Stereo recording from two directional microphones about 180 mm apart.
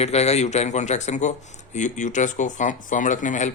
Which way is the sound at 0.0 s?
35° left (ahead or behind).